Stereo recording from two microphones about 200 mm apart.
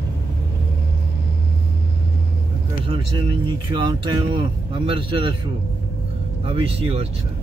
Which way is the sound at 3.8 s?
25° right (ahead or behind).